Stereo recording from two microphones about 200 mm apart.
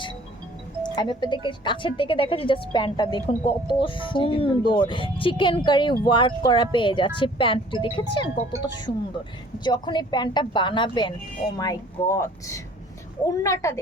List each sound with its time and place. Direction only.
0.9 s speech: 25° left (ahead or behind)